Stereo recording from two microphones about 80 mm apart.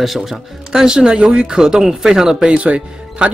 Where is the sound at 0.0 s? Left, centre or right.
Centre.